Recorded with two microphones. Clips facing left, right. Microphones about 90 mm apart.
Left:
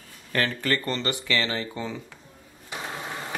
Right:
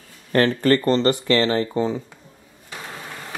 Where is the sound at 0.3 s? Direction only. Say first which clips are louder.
Right 9 dB; 35° right (ahead or behind).